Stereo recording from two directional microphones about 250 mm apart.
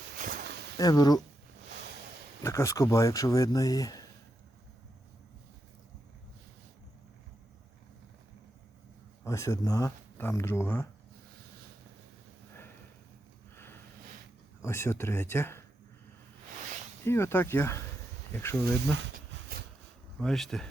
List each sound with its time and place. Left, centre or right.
0.2 s a sound: right
0.8 s speech: centre
2.4 s speech: centre
9.2 s speech: centre
14.6 s speech: centre
17.1 s speech: centre
18.9 s a sound: right
20.1 s speech: centre